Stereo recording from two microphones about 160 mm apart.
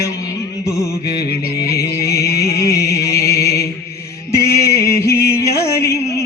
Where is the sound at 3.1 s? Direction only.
90° left.